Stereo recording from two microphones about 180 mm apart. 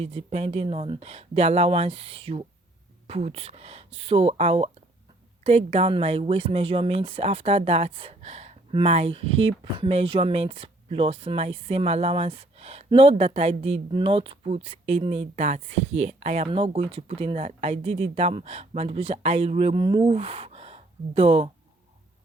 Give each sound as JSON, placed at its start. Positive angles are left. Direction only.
{"t": 0.0, "sound": "speech", "side_deg": -35}